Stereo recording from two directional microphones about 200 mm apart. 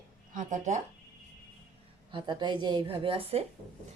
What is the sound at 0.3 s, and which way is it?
Speech, 40° right (ahead or behind).